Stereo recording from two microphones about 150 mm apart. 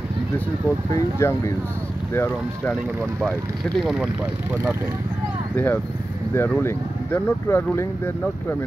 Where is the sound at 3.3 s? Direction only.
Centre (ahead or behind).